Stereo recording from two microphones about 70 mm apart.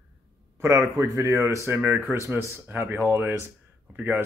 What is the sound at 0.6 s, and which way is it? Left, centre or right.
Speech, right.